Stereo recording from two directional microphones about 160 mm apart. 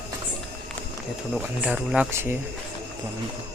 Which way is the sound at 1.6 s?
5° right (ahead or behind).